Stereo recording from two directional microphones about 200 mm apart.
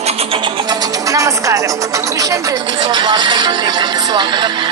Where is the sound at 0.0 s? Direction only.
30° right (ahead or behind).